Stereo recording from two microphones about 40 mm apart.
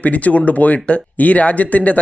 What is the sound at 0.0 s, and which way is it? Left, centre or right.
Speech, left.